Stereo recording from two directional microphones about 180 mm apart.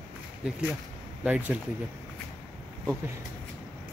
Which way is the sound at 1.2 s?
10° right (ahead or behind).